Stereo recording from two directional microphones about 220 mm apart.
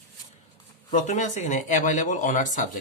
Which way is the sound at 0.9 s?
35° left (ahead or behind).